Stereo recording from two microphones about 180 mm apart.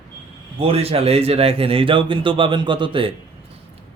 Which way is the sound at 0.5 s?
30° right (ahead or behind).